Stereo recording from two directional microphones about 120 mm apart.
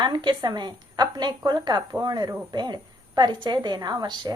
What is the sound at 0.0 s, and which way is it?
A woman's voice, 40° right (ahead or behind).